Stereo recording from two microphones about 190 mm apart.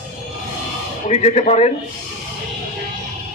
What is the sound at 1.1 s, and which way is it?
Speech, 35° left (ahead or behind).